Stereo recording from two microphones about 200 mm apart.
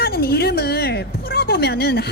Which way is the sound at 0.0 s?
50° left (ahead or behind).